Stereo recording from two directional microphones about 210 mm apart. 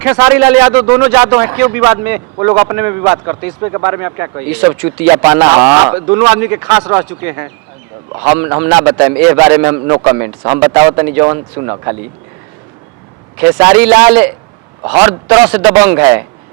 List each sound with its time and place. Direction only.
0.0 s a man's voice: 15° right (ahead or behind)
13.4 s a man's voice: 10° right (ahead or behind)